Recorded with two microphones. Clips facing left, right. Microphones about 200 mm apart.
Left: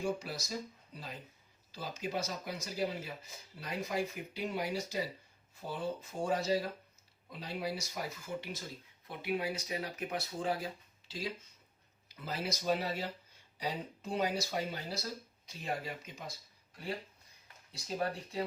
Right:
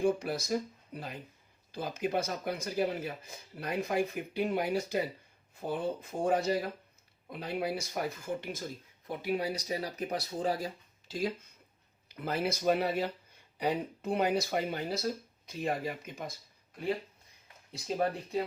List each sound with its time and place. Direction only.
0.0 s a man's voice: 55° right (ahead or behind)
9.0 s speech: 40° right (ahead or behind)
11.1 s a man's voice: 50° right (ahead or behind)